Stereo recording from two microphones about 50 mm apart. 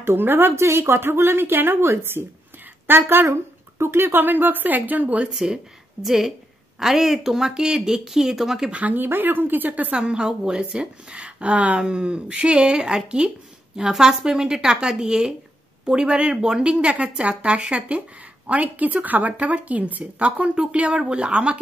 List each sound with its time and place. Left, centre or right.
0.0 s a woman's voice: right
0.7 s a woman's voice: right
3.3 s speech: right
5.3 s speech: centre
8.7 s speech: right
9.0 s speech: right
9.9 s speech: centre